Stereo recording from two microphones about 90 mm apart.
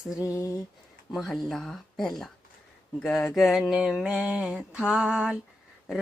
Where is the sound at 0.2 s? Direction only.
35° left (ahead or behind).